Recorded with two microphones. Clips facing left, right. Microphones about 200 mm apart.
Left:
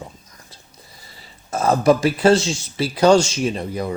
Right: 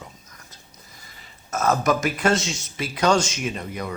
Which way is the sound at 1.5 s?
30° left (ahead or behind).